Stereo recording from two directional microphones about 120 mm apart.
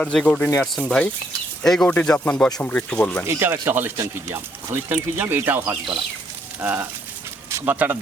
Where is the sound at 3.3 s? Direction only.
20° right (ahead or behind).